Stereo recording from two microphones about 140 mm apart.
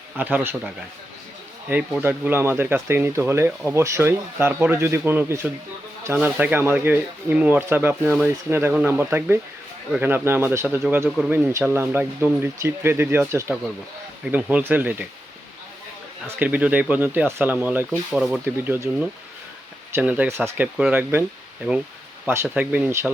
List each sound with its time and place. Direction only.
0.2 s speech: 10° right (ahead or behind)
1.7 s speech: 10° right (ahead or behind)
16.2 s speech: 10° right (ahead or behind)
22.5 s speech: 10° right (ahead or behind)